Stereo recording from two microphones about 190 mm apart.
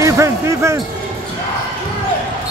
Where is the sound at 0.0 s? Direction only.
15° right (ahead or behind).